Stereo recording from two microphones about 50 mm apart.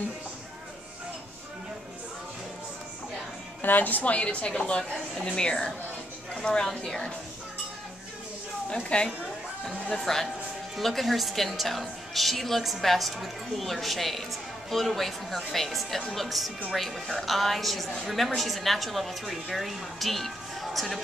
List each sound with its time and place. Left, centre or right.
3.6 s a woman's voice: left; by 7.1 s centre
8.6 s a woman's voice: left
10.0 s a woman's voice: centre